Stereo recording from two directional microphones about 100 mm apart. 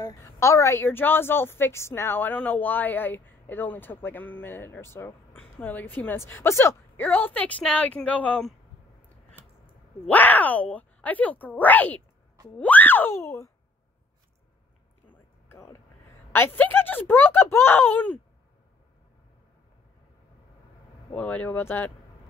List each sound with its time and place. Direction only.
0.2 s a woman's voice: 30° left (ahead or behind); by 8.4 s 15° left (ahead or behind)
10.0 s a woman's voice: 15° left (ahead or behind)
15.4 s vehicle: 25° left (ahead or behind)
16.3 s a woman's voice: 20° left (ahead or behind)
21.1 s a woman's voice: 15° left (ahead or behind)